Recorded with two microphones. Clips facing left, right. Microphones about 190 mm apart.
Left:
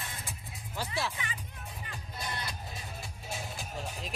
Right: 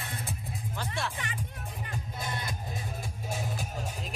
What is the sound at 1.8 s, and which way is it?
Music, 45° right (ahead or behind).